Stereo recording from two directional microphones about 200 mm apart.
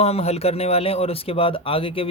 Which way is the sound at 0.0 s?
30° left (ahead or behind).